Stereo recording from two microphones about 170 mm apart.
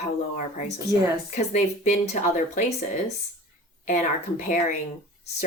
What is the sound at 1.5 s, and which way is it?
Speech, 45° left (ahead or behind).